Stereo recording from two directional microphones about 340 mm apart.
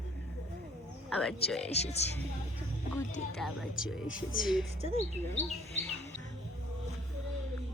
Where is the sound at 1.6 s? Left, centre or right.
Centre.